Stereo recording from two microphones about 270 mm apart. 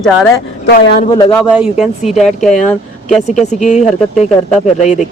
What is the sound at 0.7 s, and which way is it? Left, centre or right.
Speech, left.